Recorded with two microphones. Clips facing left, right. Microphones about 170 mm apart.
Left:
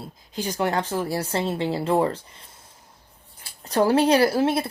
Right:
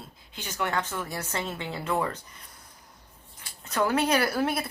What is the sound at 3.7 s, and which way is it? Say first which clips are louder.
Speech: left 6 dB; 35° left (ahead or behind).